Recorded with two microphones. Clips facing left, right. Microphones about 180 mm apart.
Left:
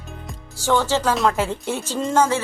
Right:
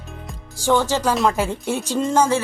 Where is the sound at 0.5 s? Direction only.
15° right (ahead or behind).